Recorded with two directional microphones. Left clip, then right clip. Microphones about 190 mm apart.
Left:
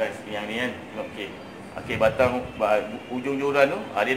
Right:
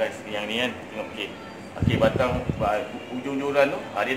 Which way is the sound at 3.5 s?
60° left (ahead or behind).